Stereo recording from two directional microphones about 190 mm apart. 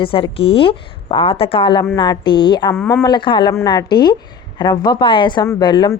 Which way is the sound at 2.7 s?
10° left (ahead or behind).